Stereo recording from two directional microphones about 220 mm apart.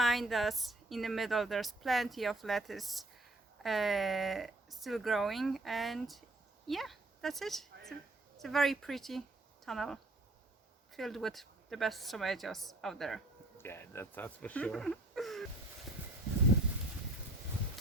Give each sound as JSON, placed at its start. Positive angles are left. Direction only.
{"t": 0.0, "sound": "a woman's voice", "side_deg": 0}